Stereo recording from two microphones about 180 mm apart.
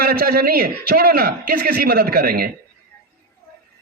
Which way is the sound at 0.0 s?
55° right (ahead or behind).